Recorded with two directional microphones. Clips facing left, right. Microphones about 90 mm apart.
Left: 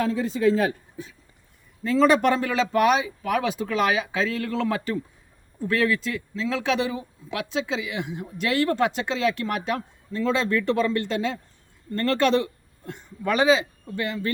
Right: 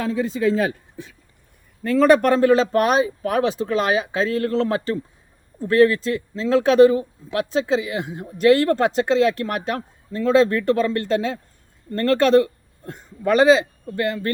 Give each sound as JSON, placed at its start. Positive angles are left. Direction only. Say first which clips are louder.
{"t": 1.8, "sound": "speech", "louder": "right 4 dB", "side_deg": -50}